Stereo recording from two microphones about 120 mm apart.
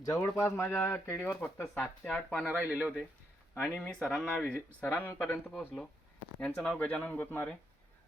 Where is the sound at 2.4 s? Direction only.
15° right (ahead or behind).